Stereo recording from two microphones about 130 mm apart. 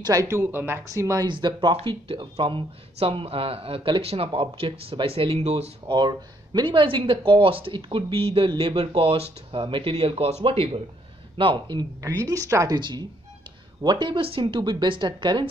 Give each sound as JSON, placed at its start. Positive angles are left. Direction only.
{"t": 0.0, "sound": "speech", "side_deg": -25}
{"t": 1.2, "sound": "speech", "side_deg": -35}
{"t": 5.9, "sound": "speech", "side_deg": -35}